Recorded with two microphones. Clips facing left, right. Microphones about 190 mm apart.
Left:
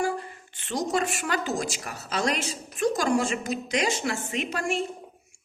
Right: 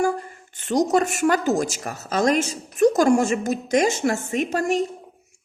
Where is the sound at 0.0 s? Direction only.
45° right (ahead or behind).